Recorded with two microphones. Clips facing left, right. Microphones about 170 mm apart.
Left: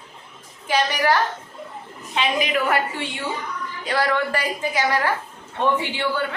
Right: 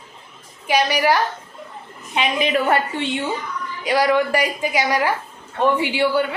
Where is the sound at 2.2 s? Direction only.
25° right (ahead or behind).